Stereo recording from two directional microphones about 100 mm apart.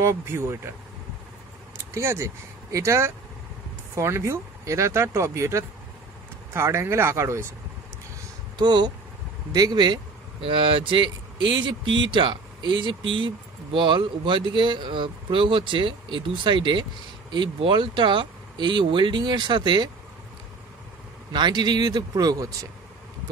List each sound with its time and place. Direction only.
0.0 s speech: 25° right (ahead or behind)
2.0 s speech: 30° right (ahead or behind)
8.5 s speech: 45° right (ahead or behind)
10.4 s speech: 60° right (ahead or behind)
21.3 s speech: 45° right (ahead or behind)